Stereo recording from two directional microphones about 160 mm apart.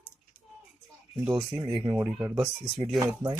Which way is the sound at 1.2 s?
20° right (ahead or behind).